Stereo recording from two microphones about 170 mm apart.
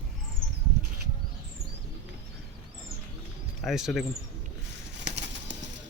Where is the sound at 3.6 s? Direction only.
Centre (ahead or behind).